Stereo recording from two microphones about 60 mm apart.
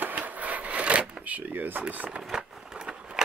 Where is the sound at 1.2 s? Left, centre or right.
Right.